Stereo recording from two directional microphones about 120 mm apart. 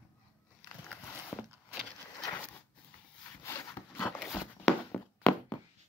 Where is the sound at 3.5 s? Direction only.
20° left (ahead or behind).